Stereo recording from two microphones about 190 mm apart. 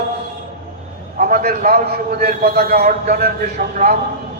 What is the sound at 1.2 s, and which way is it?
A man's voice, 45° right (ahead or behind).